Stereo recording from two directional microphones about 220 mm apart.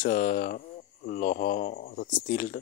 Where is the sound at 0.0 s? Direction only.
40° left (ahead or behind).